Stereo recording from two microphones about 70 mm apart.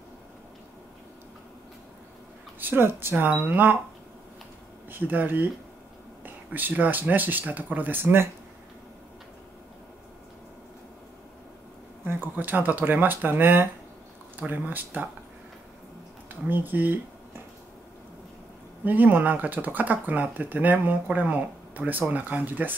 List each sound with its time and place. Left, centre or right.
2.6 s speech: right
4.9 s speech: right
12.0 s speech: right
16.3 s speech: right
18.9 s speech: right